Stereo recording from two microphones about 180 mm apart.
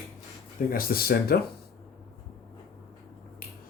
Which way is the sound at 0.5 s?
55° left (ahead or behind).